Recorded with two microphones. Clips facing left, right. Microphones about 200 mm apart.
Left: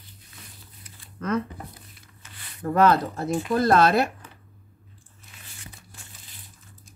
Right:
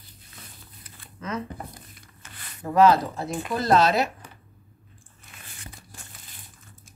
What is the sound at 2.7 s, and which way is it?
Speech, 55° left (ahead or behind).